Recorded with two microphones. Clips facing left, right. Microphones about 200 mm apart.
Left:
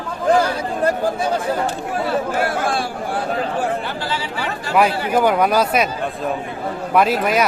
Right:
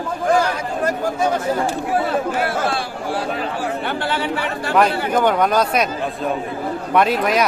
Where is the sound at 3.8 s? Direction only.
60° right (ahead or behind).